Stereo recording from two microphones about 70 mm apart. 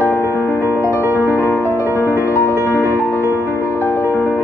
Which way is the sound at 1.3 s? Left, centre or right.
Left.